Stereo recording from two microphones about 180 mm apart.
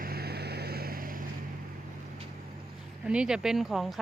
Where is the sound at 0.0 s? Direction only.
60° right (ahead or behind).